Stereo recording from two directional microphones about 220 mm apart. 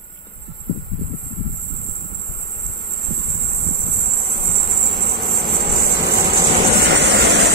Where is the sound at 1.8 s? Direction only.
Centre (ahead or behind).